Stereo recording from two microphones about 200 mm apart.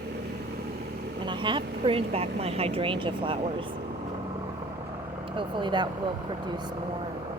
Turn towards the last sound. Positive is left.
turn(degrees=-25)  # may be behind; listen again after turning